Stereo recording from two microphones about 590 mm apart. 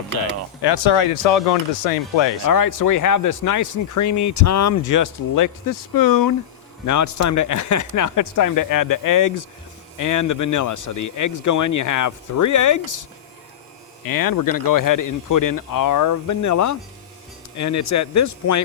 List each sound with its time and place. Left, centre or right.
0.6 s speech: left
2.5 s speech: left